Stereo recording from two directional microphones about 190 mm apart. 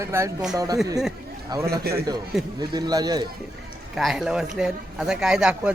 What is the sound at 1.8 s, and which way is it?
Speech, 55° right (ahead or behind).